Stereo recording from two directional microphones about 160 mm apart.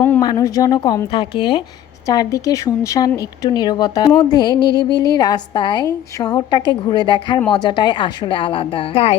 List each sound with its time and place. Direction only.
0.2 s a woman's voice: 25° left (ahead or behind)